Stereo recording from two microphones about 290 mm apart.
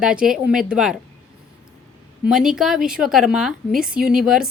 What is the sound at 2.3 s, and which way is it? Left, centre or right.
A woman's voice, centre.